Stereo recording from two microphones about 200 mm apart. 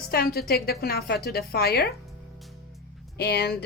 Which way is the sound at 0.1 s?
50° left (ahead or behind).